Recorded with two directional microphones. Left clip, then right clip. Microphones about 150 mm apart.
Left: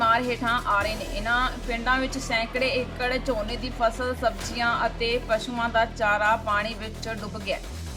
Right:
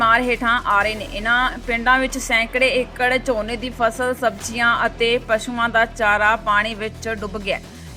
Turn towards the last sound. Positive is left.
turn(degrees=-35)  # may be behind; listen again after turning